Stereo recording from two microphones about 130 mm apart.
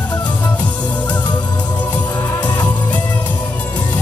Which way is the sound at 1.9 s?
15° left (ahead or behind).